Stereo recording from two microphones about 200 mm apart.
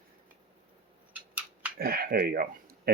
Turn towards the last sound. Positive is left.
turn(degrees=-50)  # may be behind; listen again after turning